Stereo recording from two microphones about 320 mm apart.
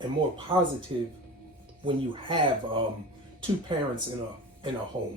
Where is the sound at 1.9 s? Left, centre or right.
Centre.